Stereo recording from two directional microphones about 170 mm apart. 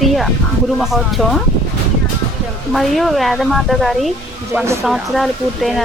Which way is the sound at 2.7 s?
Centre (ahead or behind).